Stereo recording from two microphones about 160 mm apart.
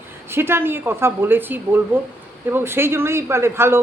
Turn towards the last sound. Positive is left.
turn(degrees=-15)  # may be behind; listen again after turning